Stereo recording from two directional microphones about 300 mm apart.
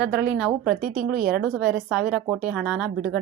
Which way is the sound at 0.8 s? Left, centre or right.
Right.